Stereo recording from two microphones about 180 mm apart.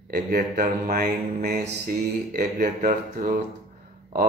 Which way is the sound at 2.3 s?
50° right (ahead or behind).